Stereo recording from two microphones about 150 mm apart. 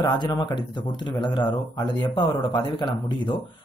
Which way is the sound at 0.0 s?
30° left (ahead or behind).